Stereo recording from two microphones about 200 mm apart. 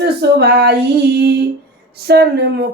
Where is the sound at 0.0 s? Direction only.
55° right (ahead or behind).